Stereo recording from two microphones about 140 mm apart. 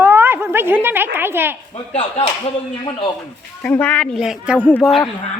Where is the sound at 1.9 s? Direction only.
45° left (ahead or behind).